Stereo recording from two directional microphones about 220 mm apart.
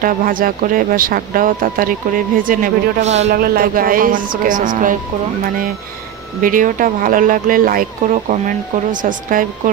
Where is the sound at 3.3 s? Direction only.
40° right (ahead or behind).